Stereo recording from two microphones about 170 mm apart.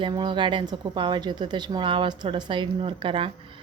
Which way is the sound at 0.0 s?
30° right (ahead or behind).